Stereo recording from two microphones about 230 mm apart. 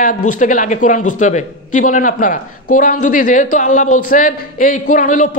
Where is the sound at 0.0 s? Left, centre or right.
Left.